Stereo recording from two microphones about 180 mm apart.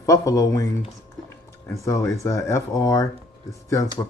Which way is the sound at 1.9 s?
15° left (ahead or behind).